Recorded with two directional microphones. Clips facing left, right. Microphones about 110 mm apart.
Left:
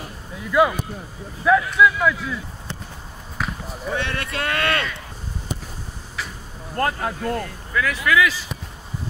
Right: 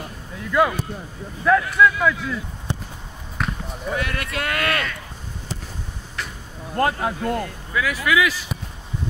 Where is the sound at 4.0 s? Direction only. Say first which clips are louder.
Even; 30° left (ahead or behind).